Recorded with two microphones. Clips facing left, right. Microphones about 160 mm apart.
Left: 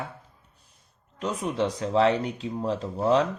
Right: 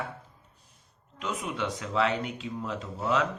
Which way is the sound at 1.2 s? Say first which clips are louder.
Left 6 dB; 35° left (ahead or behind).